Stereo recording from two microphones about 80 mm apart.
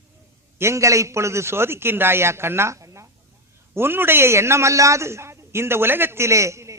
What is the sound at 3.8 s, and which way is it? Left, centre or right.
A man's voice, right.